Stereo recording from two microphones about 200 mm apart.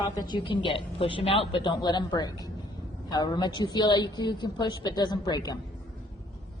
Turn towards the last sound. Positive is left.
turn(degrees=20)  # may be behind; listen again after turning